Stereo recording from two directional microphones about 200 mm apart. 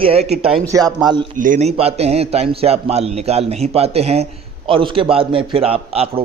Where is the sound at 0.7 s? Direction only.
15° right (ahead or behind).